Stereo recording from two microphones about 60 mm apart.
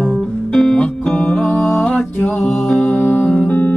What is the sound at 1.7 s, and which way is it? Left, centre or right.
Music, left.